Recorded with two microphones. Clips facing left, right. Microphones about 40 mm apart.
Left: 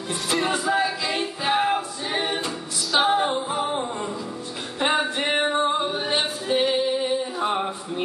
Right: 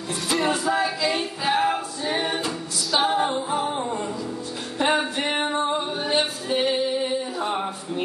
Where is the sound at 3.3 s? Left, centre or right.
Centre.